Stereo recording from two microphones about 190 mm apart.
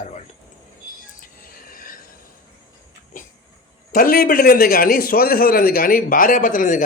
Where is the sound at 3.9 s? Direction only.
50° left (ahead or behind).